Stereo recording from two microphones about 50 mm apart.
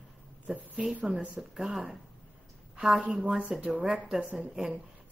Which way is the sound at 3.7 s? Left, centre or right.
Centre.